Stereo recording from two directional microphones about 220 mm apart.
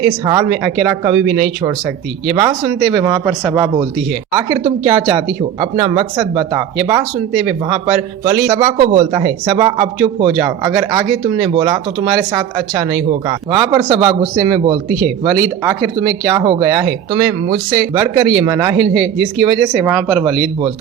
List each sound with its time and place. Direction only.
0.1 s speech: 15° right (ahead or behind)